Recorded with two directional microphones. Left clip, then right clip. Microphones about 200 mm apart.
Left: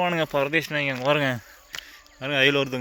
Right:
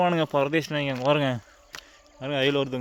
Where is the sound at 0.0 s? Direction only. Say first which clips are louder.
Even; 25° right (ahead or behind).